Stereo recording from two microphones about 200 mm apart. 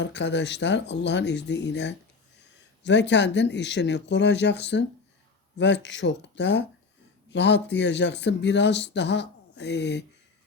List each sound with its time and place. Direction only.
0.0 s speech: 60° left (ahead or behind)